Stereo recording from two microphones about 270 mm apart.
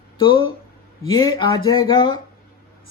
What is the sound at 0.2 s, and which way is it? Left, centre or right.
Speech, centre.